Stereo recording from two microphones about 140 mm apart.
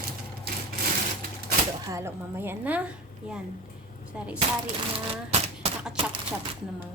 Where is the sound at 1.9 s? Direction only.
20° right (ahead or behind).